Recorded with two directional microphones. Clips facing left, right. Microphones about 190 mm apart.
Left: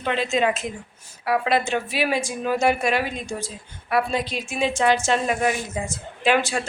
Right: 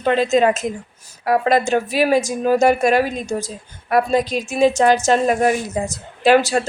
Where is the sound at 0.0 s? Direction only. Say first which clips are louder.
Right 7 dB; 40° right (ahead or behind).